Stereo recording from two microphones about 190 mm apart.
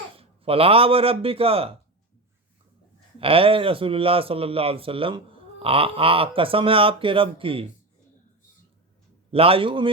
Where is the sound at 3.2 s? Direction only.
30° right (ahead or behind).